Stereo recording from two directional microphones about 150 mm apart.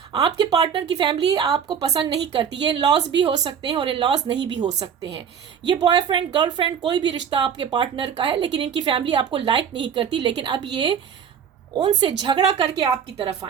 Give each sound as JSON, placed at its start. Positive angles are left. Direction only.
{"t": 0.1, "sound": "a woman's voice", "side_deg": -25}
{"t": 11.9, "sound": "a woman's voice", "side_deg": -30}